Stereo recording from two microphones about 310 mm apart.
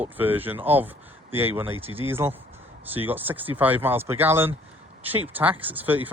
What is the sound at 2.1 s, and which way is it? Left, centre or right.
Speech, centre.